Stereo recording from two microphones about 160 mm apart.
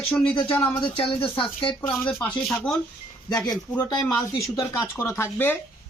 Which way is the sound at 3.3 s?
25° left (ahead or behind).